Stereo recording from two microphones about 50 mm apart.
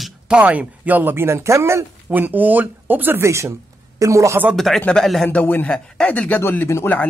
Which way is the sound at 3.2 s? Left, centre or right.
Right.